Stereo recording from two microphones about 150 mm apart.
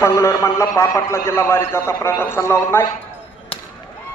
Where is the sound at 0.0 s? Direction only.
20° left (ahead or behind).